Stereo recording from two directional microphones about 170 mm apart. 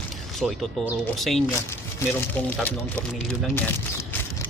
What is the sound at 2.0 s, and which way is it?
Speech, 15° left (ahead or behind).